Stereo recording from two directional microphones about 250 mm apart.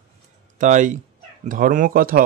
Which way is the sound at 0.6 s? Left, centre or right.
Right.